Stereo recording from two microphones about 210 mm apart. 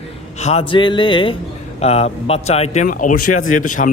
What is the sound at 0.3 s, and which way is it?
Speech, 30° left (ahead or behind).